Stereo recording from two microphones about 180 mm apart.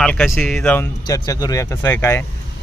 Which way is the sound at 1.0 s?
20° left (ahead or behind).